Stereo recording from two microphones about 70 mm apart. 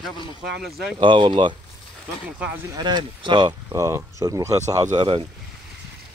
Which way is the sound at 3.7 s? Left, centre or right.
Right.